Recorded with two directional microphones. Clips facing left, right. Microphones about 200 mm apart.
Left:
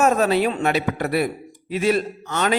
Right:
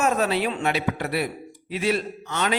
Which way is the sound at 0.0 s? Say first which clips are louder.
Left 5 dB; 45° left (ahead or behind).